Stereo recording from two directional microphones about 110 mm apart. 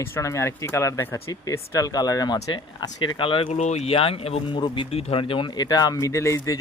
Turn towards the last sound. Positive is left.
turn(degrees=30)  # may be behind; listen again after turning